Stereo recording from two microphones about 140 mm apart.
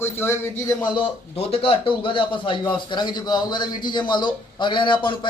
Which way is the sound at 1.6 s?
40° left (ahead or behind).